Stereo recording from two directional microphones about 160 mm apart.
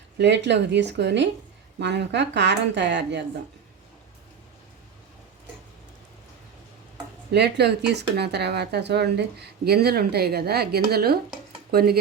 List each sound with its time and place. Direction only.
0.2 s speech: 90° right
7.3 s speech: 90° right; by 11.9 s 70° right (ahead or behind)